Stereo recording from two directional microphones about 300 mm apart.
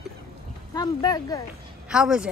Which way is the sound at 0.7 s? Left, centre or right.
Centre.